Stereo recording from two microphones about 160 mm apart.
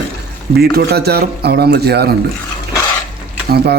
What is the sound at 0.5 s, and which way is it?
Speech, 85° right.